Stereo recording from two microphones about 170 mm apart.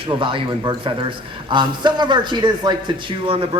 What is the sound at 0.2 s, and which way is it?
Speech, 30° right (ahead or behind).